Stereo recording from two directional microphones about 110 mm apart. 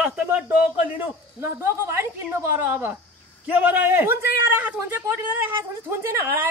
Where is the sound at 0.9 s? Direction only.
25° right (ahead or behind).